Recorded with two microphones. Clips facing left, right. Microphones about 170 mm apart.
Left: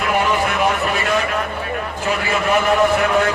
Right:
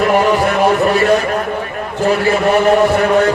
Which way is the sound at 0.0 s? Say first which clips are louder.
Right 6 dB; 40° right (ahead or behind).